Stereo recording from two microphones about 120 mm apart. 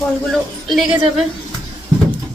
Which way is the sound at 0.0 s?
Centre (ahead or behind).